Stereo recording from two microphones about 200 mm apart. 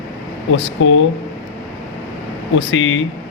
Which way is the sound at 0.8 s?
70° left (ahead or behind).